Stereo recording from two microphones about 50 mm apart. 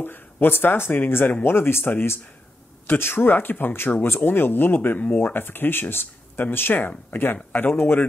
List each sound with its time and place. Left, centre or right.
0.0 s speech: left
2.9 s speech: left